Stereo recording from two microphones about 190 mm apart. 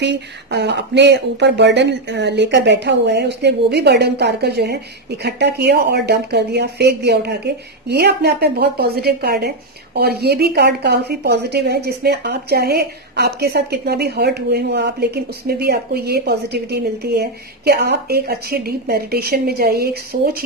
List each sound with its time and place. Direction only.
0.0 s a woman's voice: 65° right (ahead or behind)